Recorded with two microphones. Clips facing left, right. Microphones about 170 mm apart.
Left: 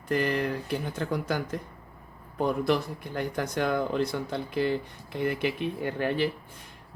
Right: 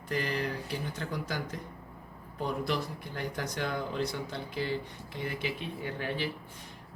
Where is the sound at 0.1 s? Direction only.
55° left (ahead or behind).